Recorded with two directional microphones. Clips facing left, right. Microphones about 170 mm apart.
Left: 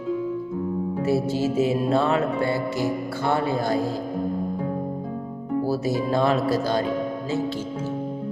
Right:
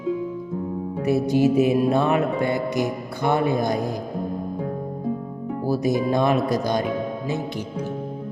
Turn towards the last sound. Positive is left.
turn(degrees=-15)  # may be behind; listen again after turning